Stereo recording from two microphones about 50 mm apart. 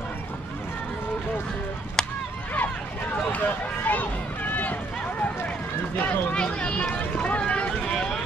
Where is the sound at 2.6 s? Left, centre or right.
Left.